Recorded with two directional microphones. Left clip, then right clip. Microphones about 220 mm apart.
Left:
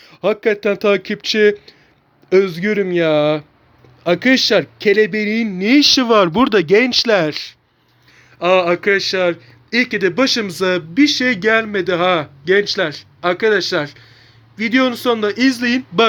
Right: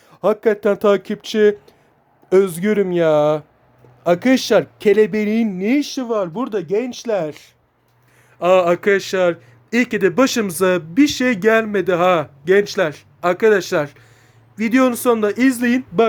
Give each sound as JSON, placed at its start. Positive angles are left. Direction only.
{"t": 0.0, "sound": "a man's voice", "side_deg": -5}
{"t": 5.5, "sound": "speech", "side_deg": 0}
{"t": 8.4, "sound": "a man's voice", "side_deg": -15}